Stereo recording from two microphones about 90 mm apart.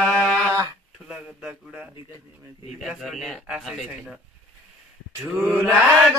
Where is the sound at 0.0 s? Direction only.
5° left (ahead or behind).